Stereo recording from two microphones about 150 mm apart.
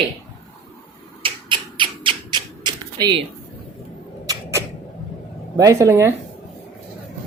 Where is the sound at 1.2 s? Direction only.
35° right (ahead or behind).